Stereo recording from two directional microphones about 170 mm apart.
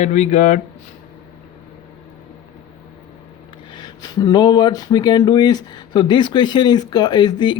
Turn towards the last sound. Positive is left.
turn(degrees=25)  # may be behind; listen again after turning